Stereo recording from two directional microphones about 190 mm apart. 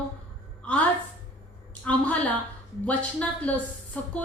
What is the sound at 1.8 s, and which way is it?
Speech, 5° left (ahead or behind).